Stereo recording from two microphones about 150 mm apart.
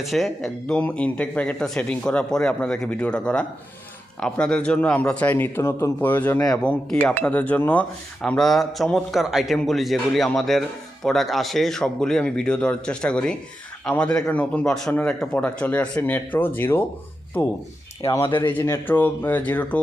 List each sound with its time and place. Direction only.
0.0 s speech: centre (ahead or behind)
18.2 s speech: 35° left (ahead or behind)
18.4 s speech: 15° left (ahead or behind)